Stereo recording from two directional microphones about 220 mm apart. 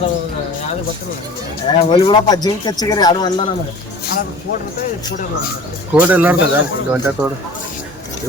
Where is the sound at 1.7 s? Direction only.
25° left (ahead or behind).